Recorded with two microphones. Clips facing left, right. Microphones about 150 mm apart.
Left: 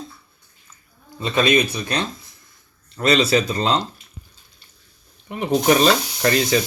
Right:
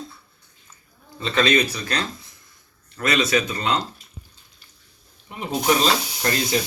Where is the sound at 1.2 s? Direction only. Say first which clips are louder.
Left 2 dB; 20° left (ahead or behind).